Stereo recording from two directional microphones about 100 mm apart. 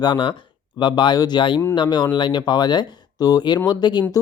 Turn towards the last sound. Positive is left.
turn(degrees=45)  # may be behind; listen again after turning